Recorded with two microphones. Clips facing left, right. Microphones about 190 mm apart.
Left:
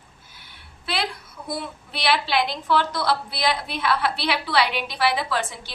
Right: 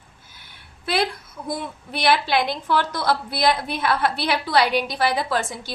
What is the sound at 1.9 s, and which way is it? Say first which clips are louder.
A woman's voice: right 3 dB; 50° right (ahead or behind).